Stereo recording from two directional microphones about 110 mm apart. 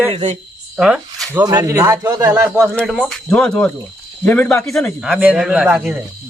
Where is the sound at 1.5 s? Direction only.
30° right (ahead or behind).